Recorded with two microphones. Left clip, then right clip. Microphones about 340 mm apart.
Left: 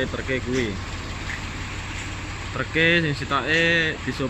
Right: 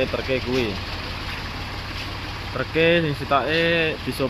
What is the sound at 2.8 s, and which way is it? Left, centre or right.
Speech, centre.